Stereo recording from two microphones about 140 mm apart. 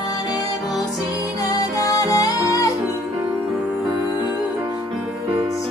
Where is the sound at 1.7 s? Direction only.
25° left (ahead or behind).